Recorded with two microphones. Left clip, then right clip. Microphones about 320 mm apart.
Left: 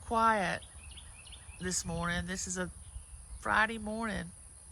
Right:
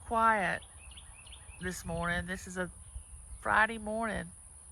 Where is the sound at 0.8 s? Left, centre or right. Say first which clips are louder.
Left 1 dB; right.